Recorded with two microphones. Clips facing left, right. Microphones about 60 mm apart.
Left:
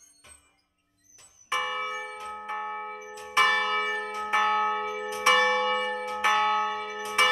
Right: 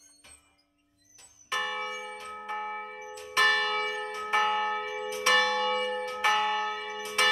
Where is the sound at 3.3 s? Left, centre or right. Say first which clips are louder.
Left 2 dB; centre.